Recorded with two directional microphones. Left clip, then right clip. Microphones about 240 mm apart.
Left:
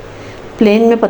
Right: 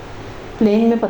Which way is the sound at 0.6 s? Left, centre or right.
Left.